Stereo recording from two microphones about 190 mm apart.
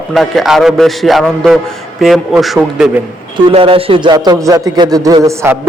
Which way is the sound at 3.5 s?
30° right (ahead or behind).